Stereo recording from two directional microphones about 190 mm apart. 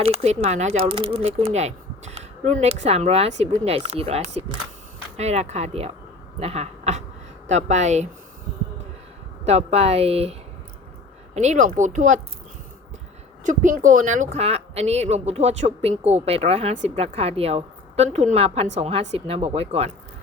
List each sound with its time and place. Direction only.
0.0 s speech: 35° right (ahead or behind)
9.5 s speech: 35° right (ahead or behind)
11.3 s speech: 40° right (ahead or behind)
13.4 s speech: 45° right (ahead or behind)